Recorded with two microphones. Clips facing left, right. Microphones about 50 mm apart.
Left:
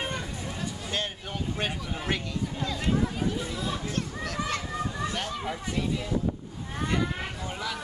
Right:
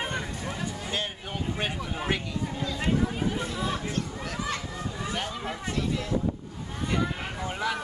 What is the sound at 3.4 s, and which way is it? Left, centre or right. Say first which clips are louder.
Chatter: right 2 dB; right.